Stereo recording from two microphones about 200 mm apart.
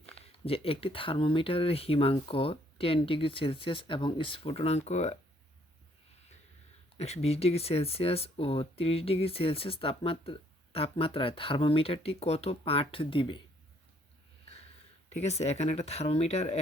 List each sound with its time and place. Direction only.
0.4 s speech: 30° left (ahead or behind)
6.9 s speech: 30° left (ahead or behind)
15.2 s speech: 35° left (ahead or behind)